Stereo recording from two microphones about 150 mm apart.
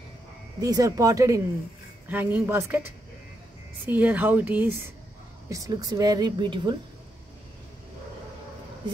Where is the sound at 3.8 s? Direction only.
10° right (ahead or behind).